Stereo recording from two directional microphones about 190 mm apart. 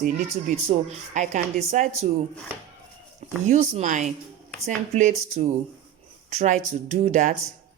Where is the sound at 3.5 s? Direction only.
40° right (ahead or behind).